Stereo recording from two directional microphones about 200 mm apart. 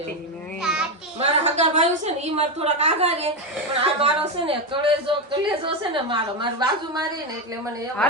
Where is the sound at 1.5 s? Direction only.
35° right (ahead or behind); by 7.9 s 15° right (ahead or behind).